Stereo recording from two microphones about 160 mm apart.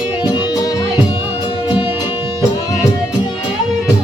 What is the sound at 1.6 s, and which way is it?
Music, 10° right (ahead or behind).